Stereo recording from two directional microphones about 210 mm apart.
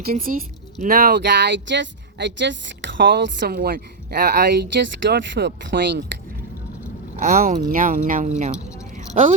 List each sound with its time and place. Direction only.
0.0 s a woman's voice: 45° right (ahead or behind)
7.2 s speech: 40° right (ahead or behind)
9.0 s a sound: 40° right (ahead or behind)